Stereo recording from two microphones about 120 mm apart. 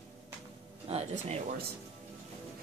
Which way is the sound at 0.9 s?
60° right (ahead or behind).